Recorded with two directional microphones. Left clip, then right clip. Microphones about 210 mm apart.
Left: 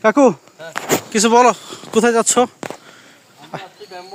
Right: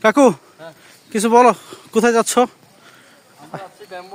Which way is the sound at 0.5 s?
Centre (ahead or behind).